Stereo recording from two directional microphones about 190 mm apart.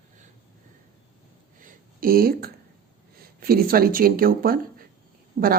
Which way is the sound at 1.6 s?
50° right (ahead or behind).